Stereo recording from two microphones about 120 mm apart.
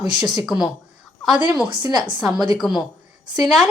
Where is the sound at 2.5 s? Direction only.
5° right (ahead or behind).